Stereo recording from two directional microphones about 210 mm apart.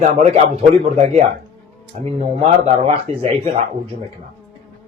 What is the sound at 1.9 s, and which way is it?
A man's voice, 35° right (ahead or behind).